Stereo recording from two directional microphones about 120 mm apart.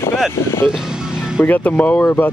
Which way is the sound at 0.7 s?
5° right (ahead or behind).